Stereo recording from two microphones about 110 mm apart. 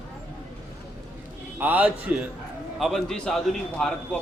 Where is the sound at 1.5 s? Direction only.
15° right (ahead or behind).